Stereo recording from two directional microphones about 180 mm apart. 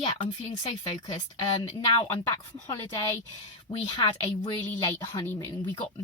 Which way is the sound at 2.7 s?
15° left (ahead or behind).